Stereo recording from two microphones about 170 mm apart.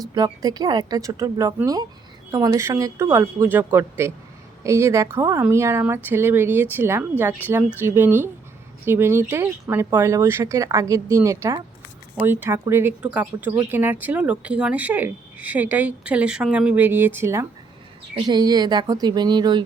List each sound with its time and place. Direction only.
0.1 s speech: 25° right (ahead or behind)
18.1 s speech: 25° right (ahead or behind)